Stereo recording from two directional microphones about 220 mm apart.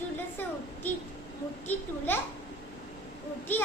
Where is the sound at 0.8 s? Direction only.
10° left (ahead or behind).